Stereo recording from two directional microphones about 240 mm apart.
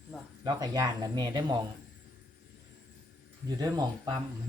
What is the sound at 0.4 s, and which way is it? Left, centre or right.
Speech, centre.